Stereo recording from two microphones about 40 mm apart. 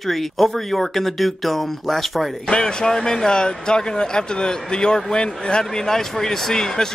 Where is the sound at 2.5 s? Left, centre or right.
Left.